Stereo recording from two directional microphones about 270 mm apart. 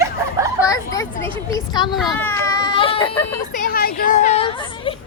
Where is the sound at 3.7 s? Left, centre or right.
Left.